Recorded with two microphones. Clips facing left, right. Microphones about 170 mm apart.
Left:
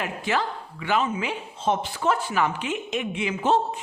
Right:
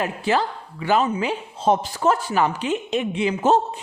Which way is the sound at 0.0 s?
35° right (ahead or behind).